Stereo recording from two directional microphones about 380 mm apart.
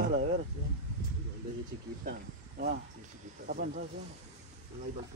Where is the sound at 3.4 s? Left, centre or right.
Right.